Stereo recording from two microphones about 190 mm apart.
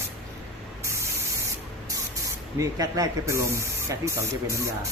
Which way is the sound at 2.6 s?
20° right (ahead or behind).